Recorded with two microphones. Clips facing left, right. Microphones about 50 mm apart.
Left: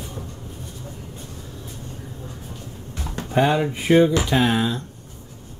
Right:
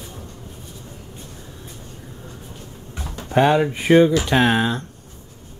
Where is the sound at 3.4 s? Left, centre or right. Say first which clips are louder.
Right 3 dB; right.